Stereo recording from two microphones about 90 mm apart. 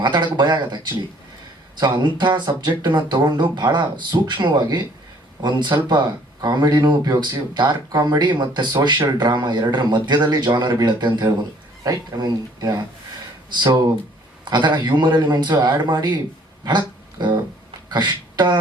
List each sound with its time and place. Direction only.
0.0 s speech: 55° right (ahead or behind)
5.4 s speech: 55° right (ahead or behind)
16.6 s a sound: 55° right (ahead or behind)